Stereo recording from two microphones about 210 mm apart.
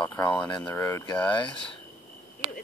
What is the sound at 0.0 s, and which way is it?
Speech, 20° left (ahead or behind).